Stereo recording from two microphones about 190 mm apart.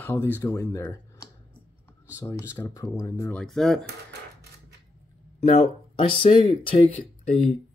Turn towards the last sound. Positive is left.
turn(degrees=30)  # may be behind; listen again after turning